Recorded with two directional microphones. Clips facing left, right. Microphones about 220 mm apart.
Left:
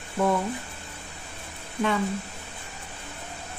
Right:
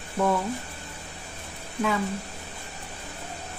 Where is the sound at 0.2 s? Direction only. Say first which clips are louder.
Even; 5° left (ahead or behind).